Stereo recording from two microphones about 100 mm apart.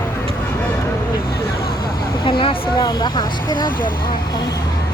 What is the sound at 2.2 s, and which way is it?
Speech, 55° left (ahead or behind).